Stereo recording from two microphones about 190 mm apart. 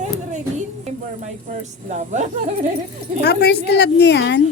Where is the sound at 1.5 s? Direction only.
35° right (ahead or behind).